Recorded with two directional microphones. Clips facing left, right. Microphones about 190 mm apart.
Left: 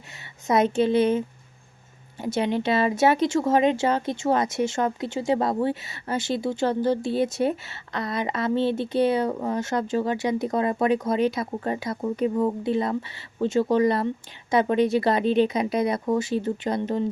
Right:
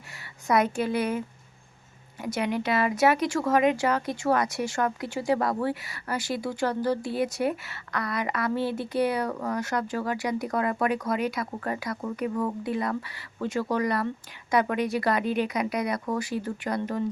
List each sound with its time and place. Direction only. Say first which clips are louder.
0.4 s speech: left 4 dB; 25° left (ahead or behind)